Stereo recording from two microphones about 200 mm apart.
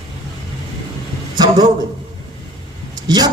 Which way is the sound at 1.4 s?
20° right (ahead or behind).